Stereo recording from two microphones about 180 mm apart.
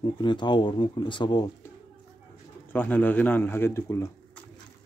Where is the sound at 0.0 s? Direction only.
25° left (ahead or behind).